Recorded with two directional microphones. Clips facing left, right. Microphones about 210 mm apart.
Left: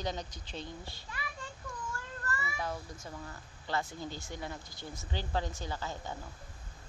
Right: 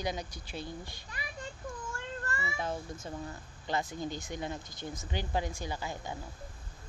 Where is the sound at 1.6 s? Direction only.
25° right (ahead or behind).